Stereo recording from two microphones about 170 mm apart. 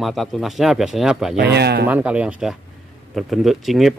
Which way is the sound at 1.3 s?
75° right (ahead or behind).